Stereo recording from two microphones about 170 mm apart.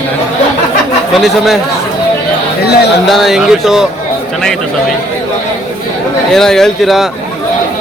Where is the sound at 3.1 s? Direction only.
Centre (ahead or behind).